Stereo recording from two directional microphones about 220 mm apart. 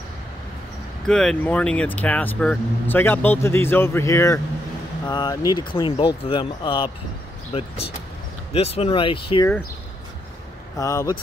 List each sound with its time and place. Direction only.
1.0 s speech: 5° left (ahead or behind); by 9.2 s 25° left (ahead or behind)
10.8 s speech: 15° left (ahead or behind)